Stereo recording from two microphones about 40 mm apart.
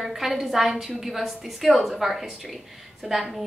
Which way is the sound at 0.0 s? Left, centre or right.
Centre.